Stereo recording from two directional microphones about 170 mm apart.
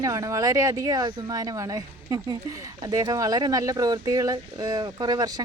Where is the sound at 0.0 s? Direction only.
20° right (ahead or behind).